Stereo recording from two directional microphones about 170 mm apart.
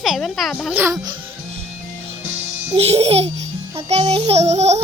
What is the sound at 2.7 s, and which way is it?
Speech, 35° right (ahead or behind).